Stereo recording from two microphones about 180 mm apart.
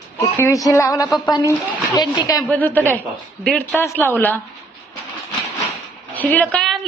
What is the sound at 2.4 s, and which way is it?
Speech, 10° left (ahead or behind).